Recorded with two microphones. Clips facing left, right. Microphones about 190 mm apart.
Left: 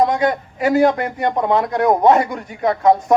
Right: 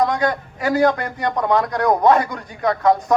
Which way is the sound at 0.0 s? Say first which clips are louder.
Left 3 dB; 25° left (ahead or behind).